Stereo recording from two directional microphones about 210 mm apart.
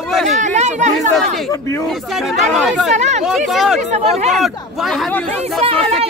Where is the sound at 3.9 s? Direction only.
30° right (ahead or behind).